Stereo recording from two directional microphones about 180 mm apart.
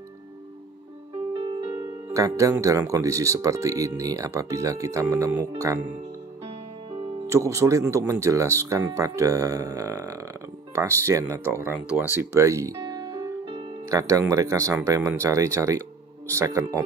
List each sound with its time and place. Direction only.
1.3 s music: 25° right (ahead or behind)
2.1 s speech: 20° right (ahead or behind)
7.2 s speech: 15° right (ahead or behind)